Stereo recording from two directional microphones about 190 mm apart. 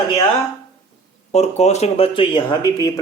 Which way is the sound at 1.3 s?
35° left (ahead or behind).